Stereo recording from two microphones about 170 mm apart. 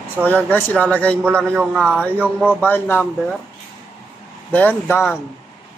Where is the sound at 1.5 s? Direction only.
5° right (ahead or behind).